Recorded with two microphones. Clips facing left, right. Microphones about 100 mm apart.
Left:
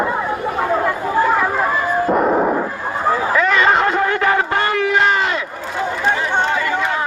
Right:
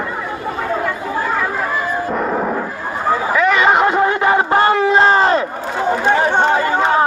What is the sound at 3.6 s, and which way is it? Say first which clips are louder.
Crowd: right 2 dB; 20° right (ahead or behind).